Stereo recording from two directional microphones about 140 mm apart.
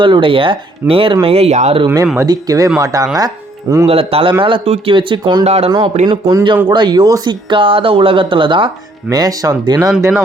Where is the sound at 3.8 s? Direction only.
45° right (ahead or behind).